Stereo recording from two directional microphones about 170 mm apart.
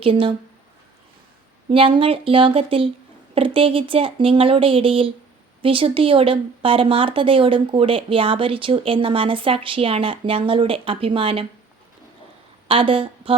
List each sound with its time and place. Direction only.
0.0 s a woman's voice: 30° right (ahead or behind)
1.7 s a woman's voice: 30° right (ahead or behind)
12.6 s a woman's voice: 30° right (ahead or behind)